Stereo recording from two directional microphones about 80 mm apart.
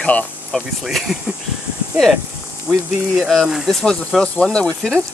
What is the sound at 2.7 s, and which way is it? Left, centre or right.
Speech, centre.